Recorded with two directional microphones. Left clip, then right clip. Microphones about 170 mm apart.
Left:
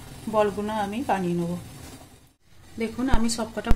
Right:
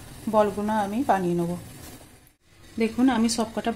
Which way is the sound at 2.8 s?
25° right (ahead or behind).